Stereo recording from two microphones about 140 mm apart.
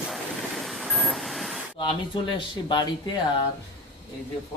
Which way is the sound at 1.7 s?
35° left (ahead or behind).